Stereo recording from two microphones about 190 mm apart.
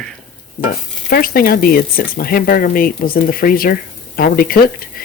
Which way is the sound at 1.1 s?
50° left (ahead or behind).